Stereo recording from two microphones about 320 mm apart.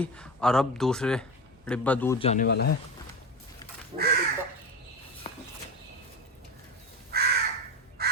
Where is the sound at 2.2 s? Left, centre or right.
Left.